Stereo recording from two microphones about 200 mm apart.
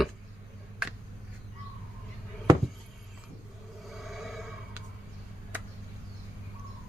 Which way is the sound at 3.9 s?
Centre (ahead or behind).